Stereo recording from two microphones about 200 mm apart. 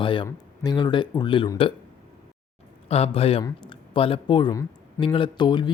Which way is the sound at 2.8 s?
30° left (ahead or behind).